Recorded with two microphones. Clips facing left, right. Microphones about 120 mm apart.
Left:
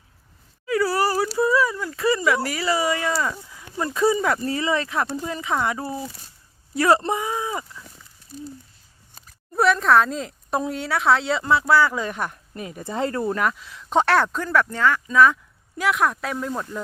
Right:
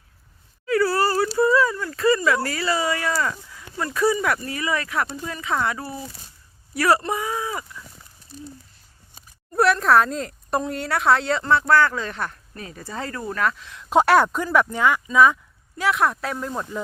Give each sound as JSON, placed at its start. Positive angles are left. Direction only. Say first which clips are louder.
{"t": 0.6, "sound": "dog", "louder": "right 1 dB", "side_deg": 15}
{"t": 4.4, "sound": "speech", "louder": "left 3 dB", "side_deg": 30}
{"t": 9.6, "sound": "speech", "louder": "even", "side_deg": 0}
{"t": 13.4, "sound": "speech", "louder": "even", "side_deg": 10}
{"t": 14.0, "sound": "speech", "louder": "right 3 dB", "side_deg": -10}